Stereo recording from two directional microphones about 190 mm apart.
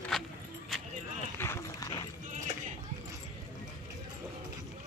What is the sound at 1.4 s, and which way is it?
Run, 15° left (ahead or behind).